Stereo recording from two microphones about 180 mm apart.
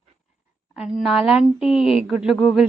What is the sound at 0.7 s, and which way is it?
Speech, 5° right (ahead or behind).